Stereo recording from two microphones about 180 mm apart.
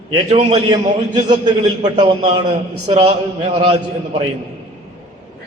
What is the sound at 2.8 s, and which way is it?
Speech, 25° right (ahead or behind).